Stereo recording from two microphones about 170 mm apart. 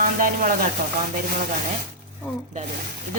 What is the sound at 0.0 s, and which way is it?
Speech, 50° right (ahead or behind).